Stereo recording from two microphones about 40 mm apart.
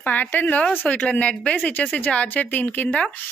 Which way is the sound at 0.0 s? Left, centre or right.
Left.